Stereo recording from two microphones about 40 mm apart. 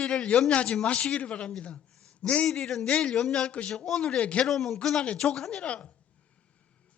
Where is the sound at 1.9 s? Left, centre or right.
Centre.